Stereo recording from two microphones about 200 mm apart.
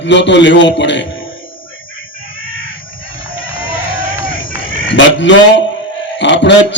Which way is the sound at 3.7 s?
45° left (ahead or behind).